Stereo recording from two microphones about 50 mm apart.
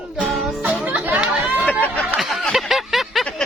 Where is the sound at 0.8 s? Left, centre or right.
Right.